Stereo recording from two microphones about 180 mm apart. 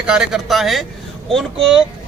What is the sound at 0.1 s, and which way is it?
Speech, 5° right (ahead or behind).